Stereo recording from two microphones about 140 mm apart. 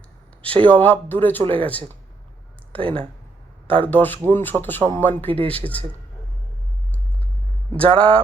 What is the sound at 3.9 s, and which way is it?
Speech, 15° left (ahead or behind).